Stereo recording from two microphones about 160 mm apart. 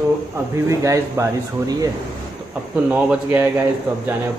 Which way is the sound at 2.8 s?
10° right (ahead or behind).